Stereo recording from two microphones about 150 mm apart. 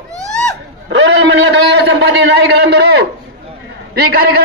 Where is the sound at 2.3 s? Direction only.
90° right.